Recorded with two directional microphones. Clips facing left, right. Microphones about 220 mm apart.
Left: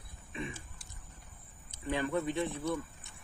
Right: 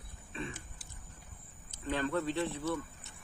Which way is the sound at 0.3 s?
15° left (ahead or behind).